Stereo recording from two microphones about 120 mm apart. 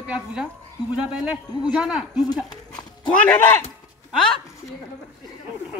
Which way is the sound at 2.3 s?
35° left (ahead or behind).